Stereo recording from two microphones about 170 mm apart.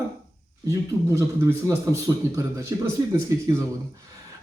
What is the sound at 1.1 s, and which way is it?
A man's voice, 15° right (ahead or behind).